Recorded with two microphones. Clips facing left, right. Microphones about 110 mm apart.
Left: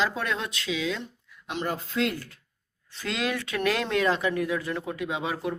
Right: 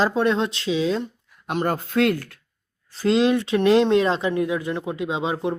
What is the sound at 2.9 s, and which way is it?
Speech, 30° right (ahead or behind).